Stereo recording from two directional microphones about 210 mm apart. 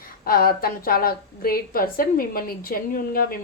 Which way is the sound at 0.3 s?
45° left (ahead or behind).